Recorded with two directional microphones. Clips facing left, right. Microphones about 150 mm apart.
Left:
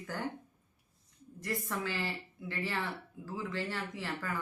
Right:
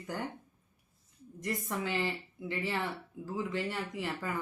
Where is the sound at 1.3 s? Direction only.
20° right (ahead or behind).